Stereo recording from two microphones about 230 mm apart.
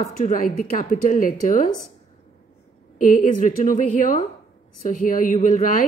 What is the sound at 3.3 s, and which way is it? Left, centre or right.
A woman's voice, left.